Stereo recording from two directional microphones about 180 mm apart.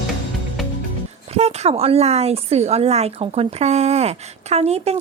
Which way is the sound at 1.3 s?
35° right (ahead or behind).